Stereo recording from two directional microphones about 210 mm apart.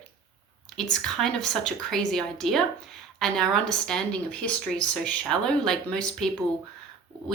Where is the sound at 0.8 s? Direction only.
Centre (ahead or behind).